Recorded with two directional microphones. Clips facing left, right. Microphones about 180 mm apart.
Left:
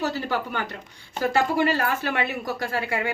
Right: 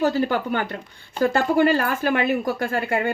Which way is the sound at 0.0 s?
50° right (ahead or behind).